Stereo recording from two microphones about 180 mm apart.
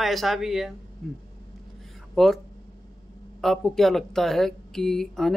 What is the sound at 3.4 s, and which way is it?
Speech, centre (ahead or behind).